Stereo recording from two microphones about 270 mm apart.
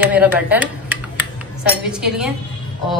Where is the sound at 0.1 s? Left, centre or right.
Centre.